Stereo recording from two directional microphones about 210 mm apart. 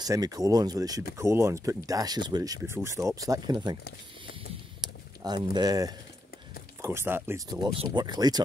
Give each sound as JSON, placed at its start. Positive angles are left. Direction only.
{"t": 0.0, "sound": "speech", "side_deg": -20}
{"t": 4.8, "sound": "speech", "side_deg": -20}